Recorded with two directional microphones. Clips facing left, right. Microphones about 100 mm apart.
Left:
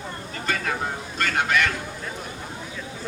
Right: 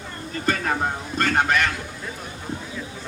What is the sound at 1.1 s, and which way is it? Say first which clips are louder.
Vehicle: right 2 dB; 40° right (ahead or behind).